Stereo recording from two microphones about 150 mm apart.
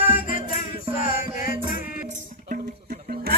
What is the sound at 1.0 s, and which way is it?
Music, 70° left (ahead or behind).